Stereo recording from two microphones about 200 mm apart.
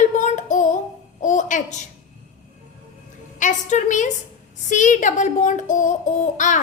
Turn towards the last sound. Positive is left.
turn(degrees=40)  # may be behind; listen again after turning